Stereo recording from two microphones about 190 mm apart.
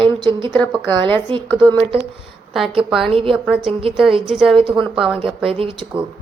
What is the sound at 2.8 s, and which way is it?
Speech, 5° right (ahead or behind).